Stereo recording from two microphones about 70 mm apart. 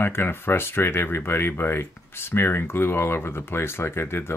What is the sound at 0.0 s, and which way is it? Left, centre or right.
Speech, left.